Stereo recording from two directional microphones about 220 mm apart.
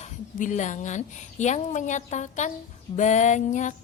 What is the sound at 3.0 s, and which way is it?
Music, 35° left (ahead or behind).